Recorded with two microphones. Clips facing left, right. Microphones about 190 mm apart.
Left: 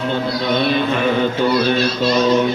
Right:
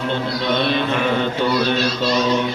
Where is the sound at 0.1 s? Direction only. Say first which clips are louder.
Left 2 dB; 5° left (ahead or behind).